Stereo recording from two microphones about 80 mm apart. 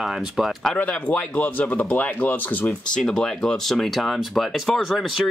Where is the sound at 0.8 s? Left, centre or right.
Centre.